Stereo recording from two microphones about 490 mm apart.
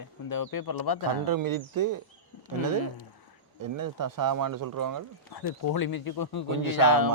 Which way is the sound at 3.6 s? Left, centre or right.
Right.